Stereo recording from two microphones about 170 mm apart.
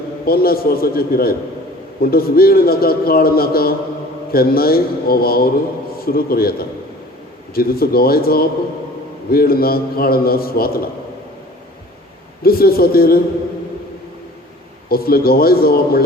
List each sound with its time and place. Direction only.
0.3 s a man's voice: 60° left (ahead or behind)
12.4 s a man's voice: 60° left (ahead or behind)
14.8 s a man's voice: 60° left (ahead or behind)